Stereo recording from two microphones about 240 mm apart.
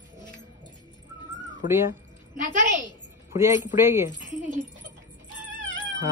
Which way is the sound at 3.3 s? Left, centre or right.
Centre.